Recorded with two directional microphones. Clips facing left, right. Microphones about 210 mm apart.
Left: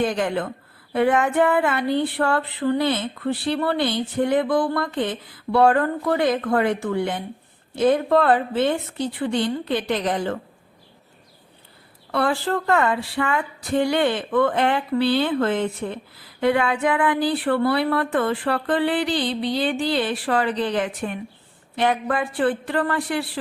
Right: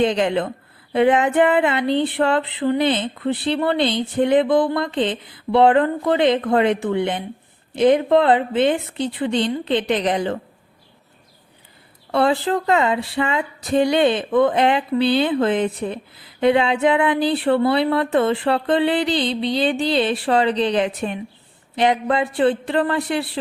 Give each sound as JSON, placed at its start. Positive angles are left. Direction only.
{"t": 0.0, "sound": "speech", "side_deg": -20}
{"t": 12.1, "sound": "speech", "side_deg": -20}